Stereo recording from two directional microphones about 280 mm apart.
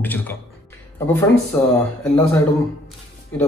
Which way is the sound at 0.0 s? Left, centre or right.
Centre.